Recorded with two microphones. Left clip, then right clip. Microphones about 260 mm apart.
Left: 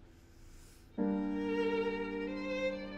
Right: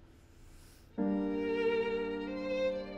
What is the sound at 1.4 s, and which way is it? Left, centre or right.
Music, right.